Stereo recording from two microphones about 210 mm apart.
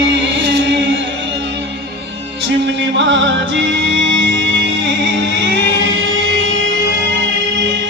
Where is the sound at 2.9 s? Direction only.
60° right (ahead or behind).